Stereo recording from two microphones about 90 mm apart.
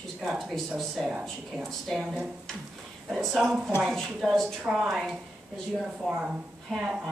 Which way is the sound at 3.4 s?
10° right (ahead or behind).